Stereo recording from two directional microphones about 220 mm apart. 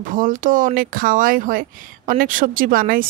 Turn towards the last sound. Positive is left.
turn(degrees=-40)  # may be behind; listen again after turning